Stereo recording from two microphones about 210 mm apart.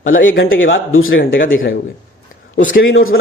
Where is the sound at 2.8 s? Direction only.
70° left (ahead or behind).